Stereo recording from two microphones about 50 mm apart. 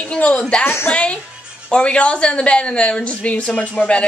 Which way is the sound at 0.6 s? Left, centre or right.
Left.